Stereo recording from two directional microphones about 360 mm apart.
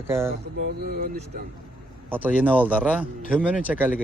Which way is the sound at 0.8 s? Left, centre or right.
Right.